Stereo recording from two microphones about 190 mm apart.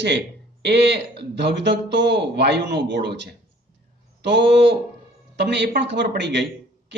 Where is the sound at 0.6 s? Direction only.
65° right (ahead or behind).